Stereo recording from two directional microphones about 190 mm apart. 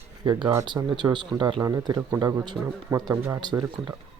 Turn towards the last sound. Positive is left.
turn(degrees=-20)  # may be behind; listen again after turning